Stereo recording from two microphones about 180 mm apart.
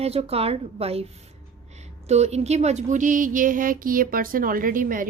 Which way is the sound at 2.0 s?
35° right (ahead or behind).